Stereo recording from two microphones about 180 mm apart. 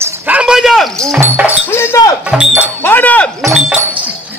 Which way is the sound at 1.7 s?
15° left (ahead or behind).